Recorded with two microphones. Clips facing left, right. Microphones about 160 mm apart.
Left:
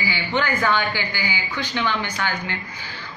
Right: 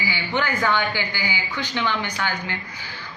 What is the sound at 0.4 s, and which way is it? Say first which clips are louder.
Speech: left 1 dB; 15° right (ahead or behind).